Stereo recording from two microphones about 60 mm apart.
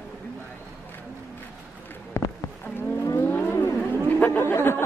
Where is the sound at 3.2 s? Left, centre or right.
Left.